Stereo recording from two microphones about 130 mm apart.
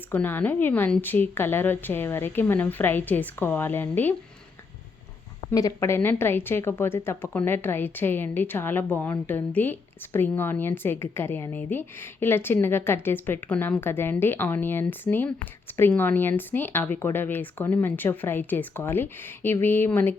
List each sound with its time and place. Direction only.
0.1 s speech: 15° left (ahead or behind)
5.5 s speech: 25° left (ahead or behind)